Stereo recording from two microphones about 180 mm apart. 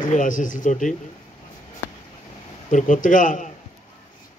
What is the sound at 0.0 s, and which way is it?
Speech, 45° left (ahead or behind).